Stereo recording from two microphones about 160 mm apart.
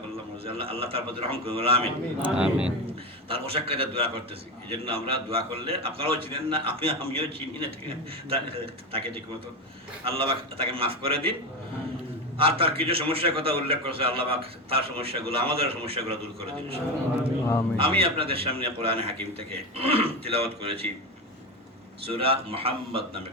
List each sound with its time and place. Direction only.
0.4 s a man's voice: 35° right (ahead or behind)
2.2 s speech: 5° right (ahead or behind)
2.8 s a man's voice: 35° right (ahead or behind)
10.0 s a man's voice: 35° right (ahead or behind)
12.4 s a man's voice: 35° right (ahead or behind)
17.4 s a man's voice: 20° left (ahead or behind)
17.7 s a man's voice: 35° right (ahead or behind)
22.0 s a man's voice: 35° right (ahead or behind)